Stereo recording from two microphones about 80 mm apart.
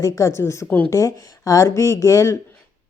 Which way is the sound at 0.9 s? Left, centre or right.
Left.